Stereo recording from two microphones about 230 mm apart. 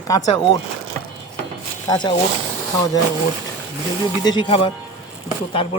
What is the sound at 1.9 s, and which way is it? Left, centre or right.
Speech, centre.